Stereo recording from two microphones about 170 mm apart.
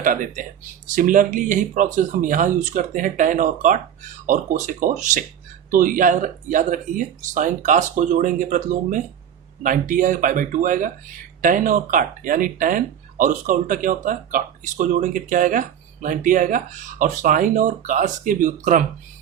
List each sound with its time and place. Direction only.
0.0 s speech: 50° right (ahead or behind)